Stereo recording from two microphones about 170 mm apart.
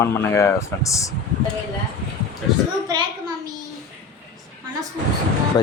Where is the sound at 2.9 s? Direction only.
25° right (ahead or behind).